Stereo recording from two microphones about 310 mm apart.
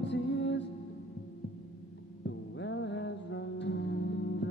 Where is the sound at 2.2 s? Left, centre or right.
Left.